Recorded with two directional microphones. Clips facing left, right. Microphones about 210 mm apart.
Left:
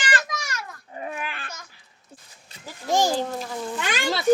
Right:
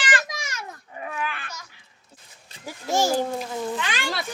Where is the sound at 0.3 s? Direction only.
20° right (ahead or behind).